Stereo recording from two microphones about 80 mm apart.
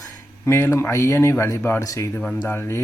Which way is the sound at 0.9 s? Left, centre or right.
Left.